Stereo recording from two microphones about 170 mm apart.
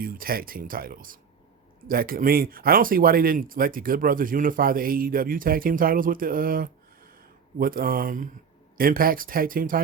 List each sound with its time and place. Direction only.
0.0 s speech: 55° right (ahead or behind)